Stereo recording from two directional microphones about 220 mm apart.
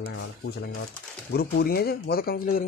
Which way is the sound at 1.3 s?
45° left (ahead or behind).